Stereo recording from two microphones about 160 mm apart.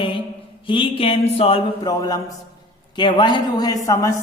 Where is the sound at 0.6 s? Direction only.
30° left (ahead or behind).